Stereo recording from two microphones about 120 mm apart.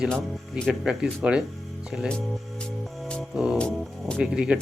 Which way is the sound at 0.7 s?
5° right (ahead or behind).